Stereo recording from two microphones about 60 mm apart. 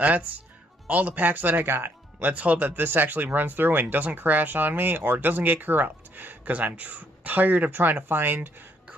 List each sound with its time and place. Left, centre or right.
0.0 s speech: right
2.2 s speech: right